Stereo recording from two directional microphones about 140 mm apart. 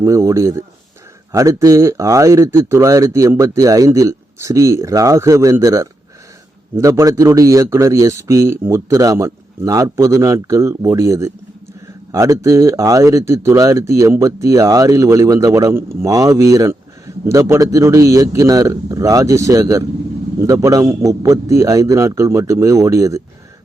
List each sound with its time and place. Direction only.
0.0 s speech: 20° right (ahead or behind)